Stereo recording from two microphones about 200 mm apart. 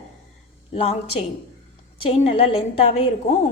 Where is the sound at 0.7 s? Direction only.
30° left (ahead or behind).